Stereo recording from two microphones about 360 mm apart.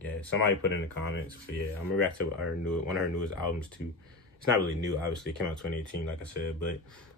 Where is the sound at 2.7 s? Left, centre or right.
Left.